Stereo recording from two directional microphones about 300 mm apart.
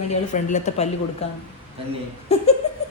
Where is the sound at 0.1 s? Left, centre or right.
Left.